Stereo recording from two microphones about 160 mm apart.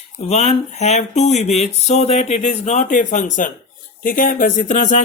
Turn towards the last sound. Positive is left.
turn(degrees=50)  # may be behind; listen again after turning